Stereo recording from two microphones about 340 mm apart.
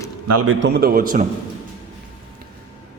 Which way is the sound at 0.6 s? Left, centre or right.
Right.